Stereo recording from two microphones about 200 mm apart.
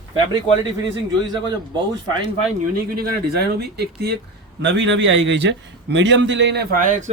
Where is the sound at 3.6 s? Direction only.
55° right (ahead or behind).